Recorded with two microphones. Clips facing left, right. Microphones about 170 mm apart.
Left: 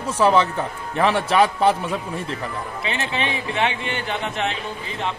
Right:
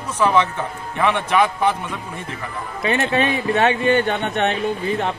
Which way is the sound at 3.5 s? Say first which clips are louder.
Right 10 dB; 40° right (ahead or behind).